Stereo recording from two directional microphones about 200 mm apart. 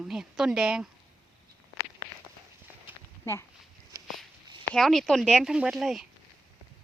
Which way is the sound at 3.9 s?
15° right (ahead or behind).